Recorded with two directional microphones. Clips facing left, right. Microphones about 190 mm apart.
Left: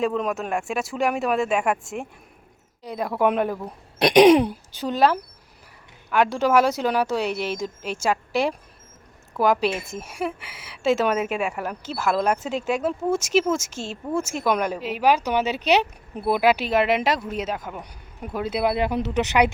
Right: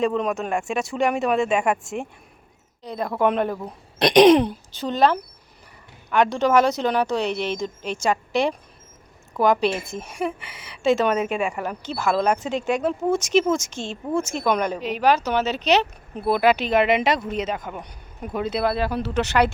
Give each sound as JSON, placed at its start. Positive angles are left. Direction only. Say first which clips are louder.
{"t": 0.0, "sound": "a woman's voice", "louder": "right 2 dB", "side_deg": 0}